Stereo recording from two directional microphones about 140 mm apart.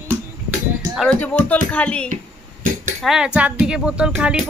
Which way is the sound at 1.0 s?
10° left (ahead or behind).